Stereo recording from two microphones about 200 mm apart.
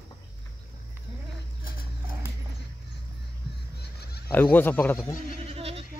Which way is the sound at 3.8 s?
55° left (ahead or behind).